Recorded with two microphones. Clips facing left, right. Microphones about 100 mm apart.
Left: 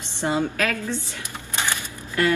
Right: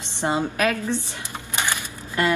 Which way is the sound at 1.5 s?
20° right (ahead or behind).